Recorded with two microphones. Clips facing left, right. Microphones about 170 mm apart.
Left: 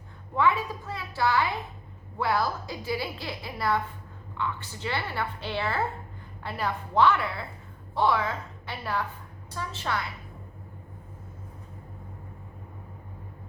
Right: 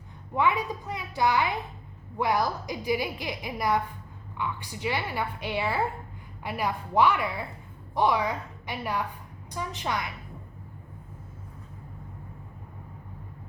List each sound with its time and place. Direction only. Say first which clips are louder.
0.3 s a woman's voice: even; 15° right (ahead or behind)